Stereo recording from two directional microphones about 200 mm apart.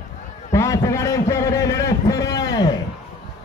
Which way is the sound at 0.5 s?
15° left (ahead or behind).